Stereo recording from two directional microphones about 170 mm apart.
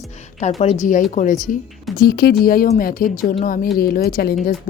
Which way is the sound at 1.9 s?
65° left (ahead or behind).